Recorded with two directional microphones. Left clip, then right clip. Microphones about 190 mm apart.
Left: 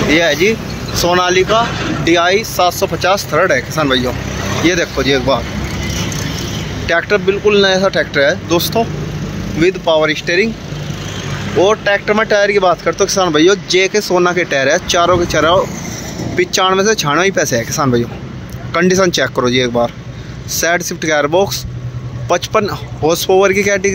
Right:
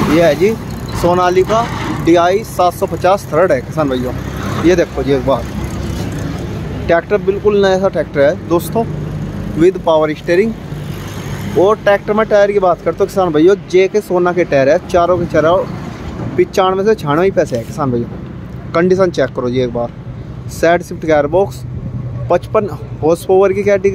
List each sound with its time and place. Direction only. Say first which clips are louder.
0.1 s speech: right 1 dB; 10° right (ahead or behind)
6.9 s speech: even; 5° right (ahead or behind)
11.7 s speech: right 1 dB; 10° right (ahead or behind)